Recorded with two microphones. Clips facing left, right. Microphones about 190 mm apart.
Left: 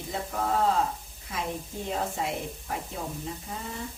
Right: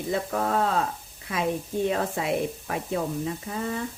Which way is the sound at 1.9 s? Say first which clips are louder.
Right 4 dB; 70° right (ahead or behind).